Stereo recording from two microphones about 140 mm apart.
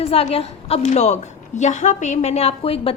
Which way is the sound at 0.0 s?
45° left (ahead or behind).